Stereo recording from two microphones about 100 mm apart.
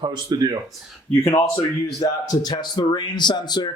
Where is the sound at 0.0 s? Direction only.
45° right (ahead or behind).